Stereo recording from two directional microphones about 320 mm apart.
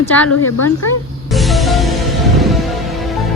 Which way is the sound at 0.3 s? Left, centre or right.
Left.